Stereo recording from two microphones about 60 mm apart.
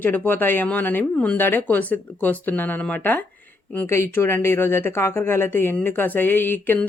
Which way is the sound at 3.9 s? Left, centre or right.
Left.